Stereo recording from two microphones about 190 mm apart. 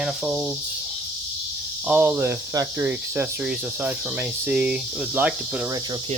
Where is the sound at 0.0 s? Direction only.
5° right (ahead or behind).